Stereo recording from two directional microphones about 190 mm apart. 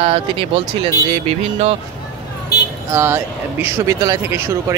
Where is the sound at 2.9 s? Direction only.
10° right (ahead or behind).